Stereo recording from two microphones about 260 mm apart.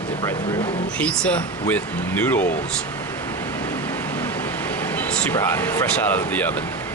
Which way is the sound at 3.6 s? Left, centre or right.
Centre.